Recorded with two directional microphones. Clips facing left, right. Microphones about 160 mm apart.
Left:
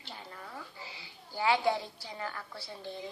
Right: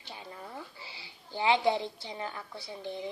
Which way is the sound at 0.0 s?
15° right (ahead or behind).